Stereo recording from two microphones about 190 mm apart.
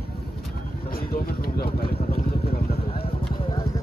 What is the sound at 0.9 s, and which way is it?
Vehicle, 50° left (ahead or behind).